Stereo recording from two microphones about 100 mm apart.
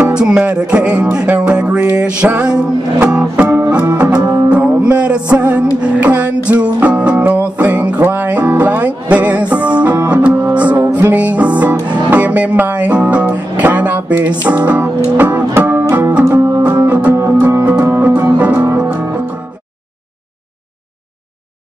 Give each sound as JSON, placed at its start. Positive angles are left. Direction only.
{"t": 0.0, "sound": "music", "side_deg": -10}
{"t": 16.3, "sound": "music", "side_deg": -30}
{"t": 16.6, "sound": "music", "side_deg": -15}